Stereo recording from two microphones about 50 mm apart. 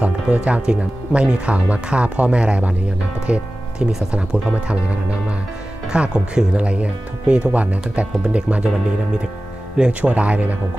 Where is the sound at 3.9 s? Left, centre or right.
Centre.